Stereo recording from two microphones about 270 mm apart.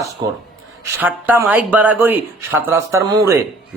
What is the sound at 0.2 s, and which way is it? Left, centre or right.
A man's voice, centre.